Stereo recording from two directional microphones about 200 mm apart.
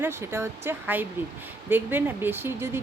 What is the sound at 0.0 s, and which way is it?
Speech, 10° right (ahead or behind).